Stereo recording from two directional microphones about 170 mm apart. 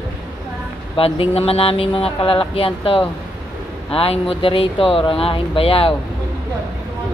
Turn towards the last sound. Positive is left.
turn(degrees=30)  # may be behind; listen again after turning